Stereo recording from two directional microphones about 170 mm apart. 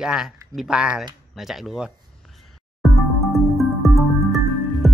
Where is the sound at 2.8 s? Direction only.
Centre (ahead or behind).